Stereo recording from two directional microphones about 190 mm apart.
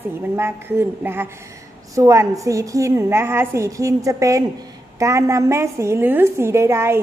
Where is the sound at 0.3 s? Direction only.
15° right (ahead or behind).